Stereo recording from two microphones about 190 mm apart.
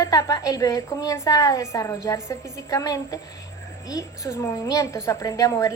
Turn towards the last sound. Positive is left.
turn(degrees=15)  # may be behind; listen again after turning